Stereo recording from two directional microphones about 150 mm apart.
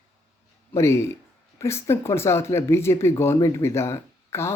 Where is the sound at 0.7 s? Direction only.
20° left (ahead or behind).